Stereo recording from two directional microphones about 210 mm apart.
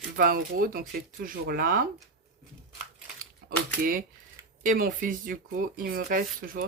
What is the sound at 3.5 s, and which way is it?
Speech, 40° right (ahead or behind).